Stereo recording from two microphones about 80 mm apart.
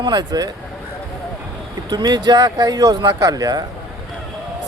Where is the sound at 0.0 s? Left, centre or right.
Right.